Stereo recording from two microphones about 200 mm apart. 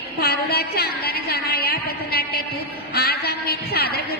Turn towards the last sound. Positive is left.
turn(degrees=50)  # may be behind; listen again after turning